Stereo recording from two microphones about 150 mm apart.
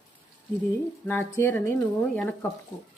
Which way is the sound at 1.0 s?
15° left (ahead or behind).